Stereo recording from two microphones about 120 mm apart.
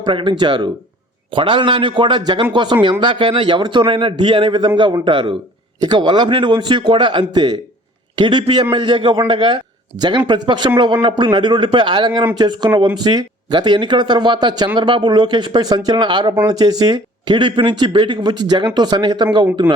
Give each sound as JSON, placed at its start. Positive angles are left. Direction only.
{"t": 0.0, "sound": "a man's voice", "side_deg": -40}